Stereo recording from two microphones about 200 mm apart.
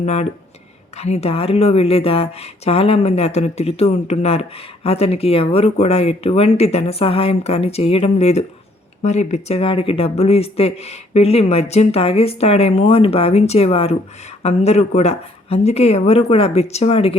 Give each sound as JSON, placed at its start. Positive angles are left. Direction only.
{"t": 0.0, "sound": "speech", "side_deg": 35}